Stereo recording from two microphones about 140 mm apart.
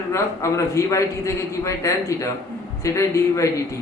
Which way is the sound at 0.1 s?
20° left (ahead or behind).